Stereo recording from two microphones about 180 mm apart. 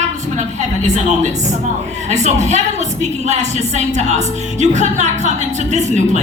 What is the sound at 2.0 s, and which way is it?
A woman's voice, 40° right (ahead or behind).